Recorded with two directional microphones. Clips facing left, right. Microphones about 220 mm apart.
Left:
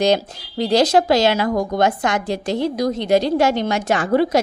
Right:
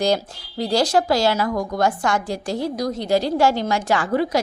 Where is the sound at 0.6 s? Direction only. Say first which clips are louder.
Left 4 dB; 20° left (ahead or behind).